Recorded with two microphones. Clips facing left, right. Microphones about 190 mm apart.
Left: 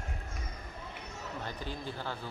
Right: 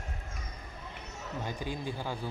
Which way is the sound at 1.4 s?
15° right (ahead or behind).